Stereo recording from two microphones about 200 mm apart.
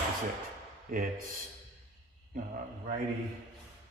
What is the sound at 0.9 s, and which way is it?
Speech, 45° right (ahead or behind).